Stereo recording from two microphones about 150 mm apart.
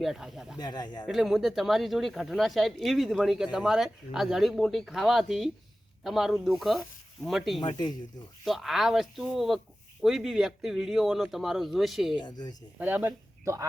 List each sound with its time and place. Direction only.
0.0 s speech: centre (ahead or behind)
0.6 s speech: 30° left (ahead or behind)
1.0 s speech: centre (ahead or behind)
12.1 s speech: 30° left (ahead or behind)
12.8 s speech: 15° right (ahead or behind)